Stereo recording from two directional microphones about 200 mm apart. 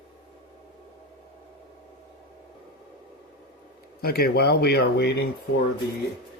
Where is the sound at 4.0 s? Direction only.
50° left (ahead or behind).